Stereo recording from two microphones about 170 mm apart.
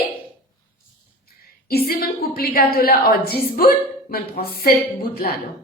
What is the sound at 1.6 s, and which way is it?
A woman's voice, 65° left (ahead or behind).